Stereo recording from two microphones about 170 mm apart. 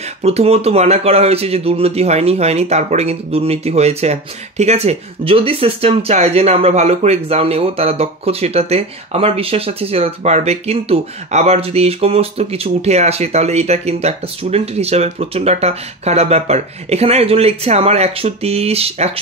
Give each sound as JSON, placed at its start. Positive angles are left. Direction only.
{"t": 0.2, "sound": "speech", "side_deg": -40}